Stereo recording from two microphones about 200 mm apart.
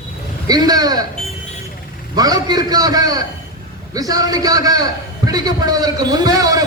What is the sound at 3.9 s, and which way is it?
A man's voice, 20° right (ahead or behind).